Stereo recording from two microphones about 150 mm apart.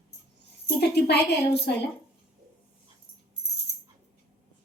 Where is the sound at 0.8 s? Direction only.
90° left.